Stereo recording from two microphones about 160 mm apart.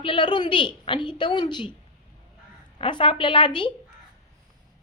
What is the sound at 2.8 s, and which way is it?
Speech, 30° left (ahead or behind).